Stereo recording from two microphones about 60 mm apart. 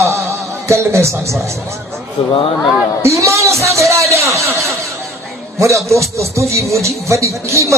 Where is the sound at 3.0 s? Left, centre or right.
Right.